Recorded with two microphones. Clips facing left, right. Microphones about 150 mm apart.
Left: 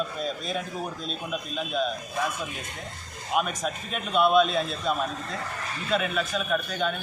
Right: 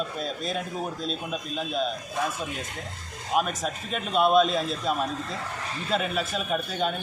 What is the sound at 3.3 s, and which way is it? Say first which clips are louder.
Speech: right 1 dB; centre (ahead or behind).